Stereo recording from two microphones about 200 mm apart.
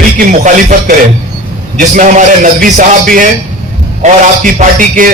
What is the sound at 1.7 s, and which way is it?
A man's voice, 40° right (ahead or behind).